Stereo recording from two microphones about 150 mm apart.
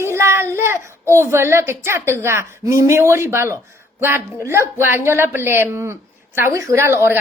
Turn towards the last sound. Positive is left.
turn(degrees=-15)  # may be behind; listen again after turning